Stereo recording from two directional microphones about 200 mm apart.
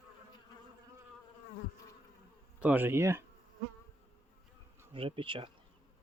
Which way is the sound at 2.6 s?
5° right (ahead or behind).